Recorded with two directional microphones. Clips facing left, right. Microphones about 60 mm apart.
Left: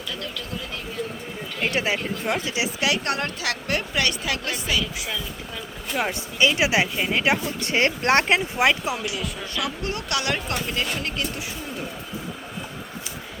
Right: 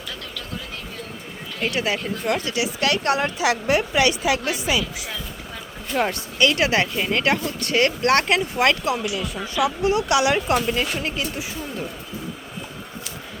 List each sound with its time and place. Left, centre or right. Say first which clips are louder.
1.6 s speech: right 1 dB; left
2.8 s speech: right 4 dB; centre
3.2 s a woman's voice: right 7 dB; centre
5.9 s speech: right 3 dB; centre
7.6 s speech: right 4 dB; left
9.1 s a woman's voice: right 5 dB; centre